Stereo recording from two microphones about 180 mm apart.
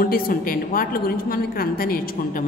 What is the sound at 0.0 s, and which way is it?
A woman's voice, 55° left (ahead or behind).